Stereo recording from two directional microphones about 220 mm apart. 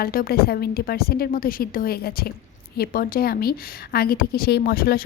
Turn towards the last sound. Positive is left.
turn(degrees=40)  # may be behind; listen again after turning